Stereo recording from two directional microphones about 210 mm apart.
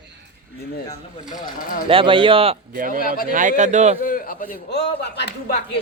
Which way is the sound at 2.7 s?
40° right (ahead or behind).